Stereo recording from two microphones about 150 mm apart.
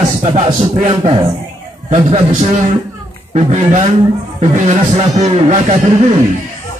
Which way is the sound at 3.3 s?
50° right (ahead or behind).